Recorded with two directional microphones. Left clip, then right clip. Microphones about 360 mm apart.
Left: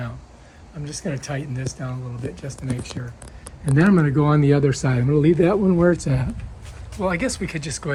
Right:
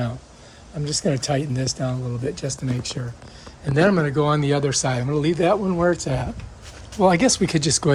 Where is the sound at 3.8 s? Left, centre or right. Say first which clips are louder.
Right 1 dB; centre.